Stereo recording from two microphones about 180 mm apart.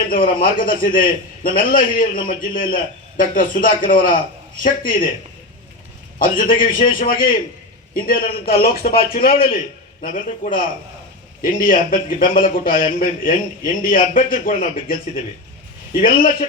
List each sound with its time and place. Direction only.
0.1 s a man's voice: 50° left (ahead or behind)
6.1 s a man's voice: 50° left (ahead or behind)
16.0 s a man's voice: 50° left (ahead or behind)